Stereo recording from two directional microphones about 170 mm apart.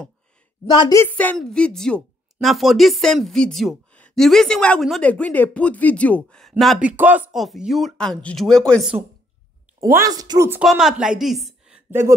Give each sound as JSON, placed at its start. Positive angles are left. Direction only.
{"t": 0.7, "sound": "a woman's voice", "side_deg": 25}
{"t": 1.0, "sound": "speech", "side_deg": 10}
{"t": 9.8, "sound": "a woman's voice", "side_deg": -15}
{"t": 10.6, "sound": "speech", "side_deg": 0}
{"t": 11.9, "sound": "speech", "side_deg": -15}